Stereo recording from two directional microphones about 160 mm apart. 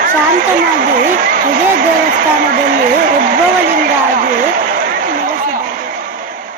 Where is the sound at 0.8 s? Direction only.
65° right (ahead or behind).